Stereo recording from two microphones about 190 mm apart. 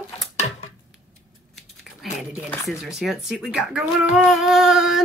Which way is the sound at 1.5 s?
Centre (ahead or behind).